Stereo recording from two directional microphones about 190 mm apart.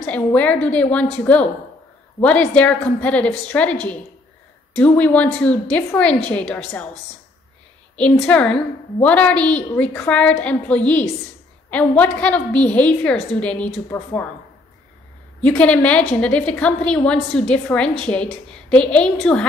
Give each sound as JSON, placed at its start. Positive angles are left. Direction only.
{"t": 0.0, "sound": "a woman's voice", "side_deg": 5}
{"t": 4.7, "sound": "a woman's voice", "side_deg": 10}
{"t": 7.9, "sound": "a woman's voice", "side_deg": 5}
{"t": 15.4, "sound": "a woman's voice", "side_deg": 5}